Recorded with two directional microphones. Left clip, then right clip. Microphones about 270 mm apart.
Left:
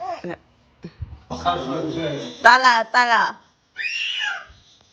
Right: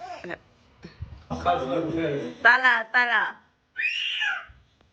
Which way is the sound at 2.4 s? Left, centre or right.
Centre.